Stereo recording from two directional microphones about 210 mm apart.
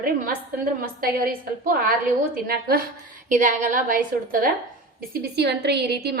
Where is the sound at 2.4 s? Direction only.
45° right (ahead or behind).